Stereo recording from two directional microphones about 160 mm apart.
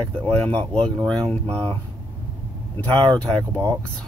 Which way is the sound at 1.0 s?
25° right (ahead or behind).